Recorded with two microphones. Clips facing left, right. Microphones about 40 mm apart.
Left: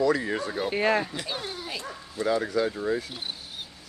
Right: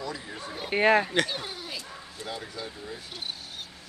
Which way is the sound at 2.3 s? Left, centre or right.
Left.